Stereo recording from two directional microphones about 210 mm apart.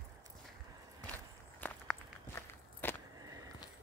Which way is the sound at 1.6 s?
10° left (ahead or behind).